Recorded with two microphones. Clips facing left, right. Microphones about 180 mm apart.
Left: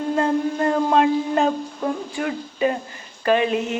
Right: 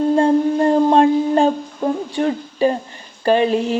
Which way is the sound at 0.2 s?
30° right (ahead or behind).